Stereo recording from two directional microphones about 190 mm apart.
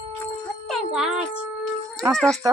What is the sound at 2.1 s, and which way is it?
Speech, 5° left (ahead or behind).